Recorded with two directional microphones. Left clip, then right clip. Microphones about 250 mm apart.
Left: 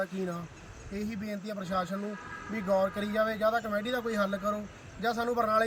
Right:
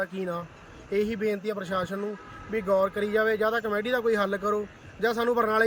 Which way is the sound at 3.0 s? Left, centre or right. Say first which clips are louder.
Right 4 dB; right.